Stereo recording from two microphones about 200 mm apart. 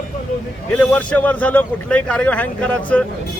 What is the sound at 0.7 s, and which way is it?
A man's voice, 5° left (ahead or behind).